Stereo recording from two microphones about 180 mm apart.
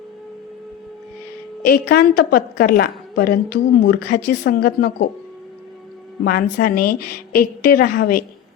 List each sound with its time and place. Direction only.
1.6 s a woman's voice: 55° left (ahead or behind)
6.2 s a woman's voice: 55° left (ahead or behind)